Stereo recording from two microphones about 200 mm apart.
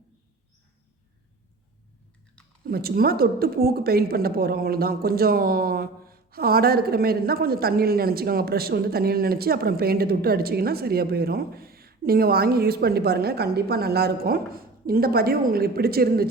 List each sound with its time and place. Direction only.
2.6 s speech: 50° right (ahead or behind)